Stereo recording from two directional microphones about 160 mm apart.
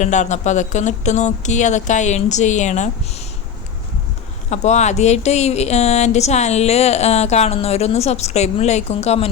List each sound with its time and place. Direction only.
0.0 s speech: 45° left (ahead or behind)
4.4 s speech: 45° left (ahead or behind)